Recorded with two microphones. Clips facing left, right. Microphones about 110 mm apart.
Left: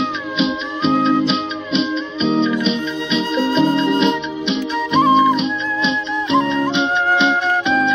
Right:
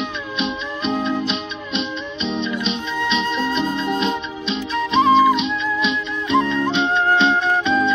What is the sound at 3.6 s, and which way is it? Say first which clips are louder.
Music: left 6 dB; 90° left.